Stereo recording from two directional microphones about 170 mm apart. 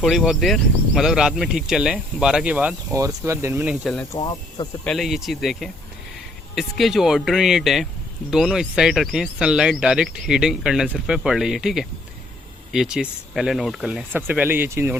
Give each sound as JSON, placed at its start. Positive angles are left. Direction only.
{"t": 0.0, "sound": "speech", "side_deg": 0}
{"t": 2.9, "sound": "speech", "side_deg": -20}
{"t": 4.2, "sound": "speech", "side_deg": 30}
{"t": 4.8, "sound": "speech", "side_deg": 0}